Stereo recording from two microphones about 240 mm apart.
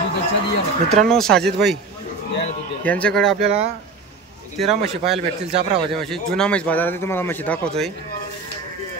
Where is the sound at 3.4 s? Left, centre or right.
Right.